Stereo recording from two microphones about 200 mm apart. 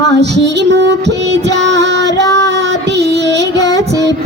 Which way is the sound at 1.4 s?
60° right (ahead or behind).